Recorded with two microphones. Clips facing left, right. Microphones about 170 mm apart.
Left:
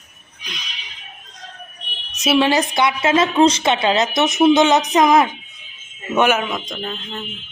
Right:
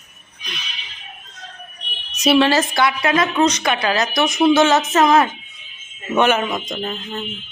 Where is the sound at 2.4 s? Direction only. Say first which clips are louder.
Left 1 dB; 15° left (ahead or behind).